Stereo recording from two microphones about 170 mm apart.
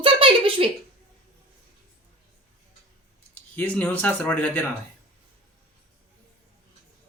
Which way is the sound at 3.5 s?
10° left (ahead or behind).